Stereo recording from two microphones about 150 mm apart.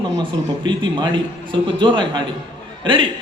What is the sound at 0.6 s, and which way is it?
A man's voice, 30° right (ahead or behind).